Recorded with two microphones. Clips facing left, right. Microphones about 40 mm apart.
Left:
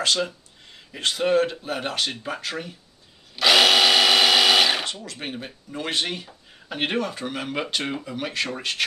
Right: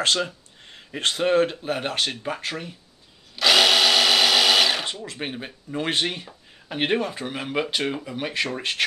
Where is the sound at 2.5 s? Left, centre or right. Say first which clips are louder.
Even; centre.